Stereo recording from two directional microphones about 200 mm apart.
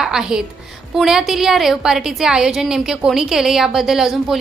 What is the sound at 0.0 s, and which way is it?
A woman's voice, 5° right (ahead or behind).